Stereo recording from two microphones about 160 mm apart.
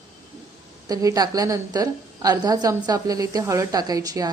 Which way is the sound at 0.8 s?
25° right (ahead or behind).